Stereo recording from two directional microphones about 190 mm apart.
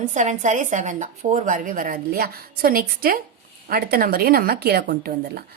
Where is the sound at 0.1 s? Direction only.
40° right (ahead or behind).